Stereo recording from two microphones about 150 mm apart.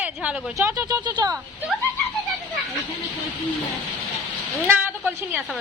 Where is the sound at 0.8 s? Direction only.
25° right (ahead or behind).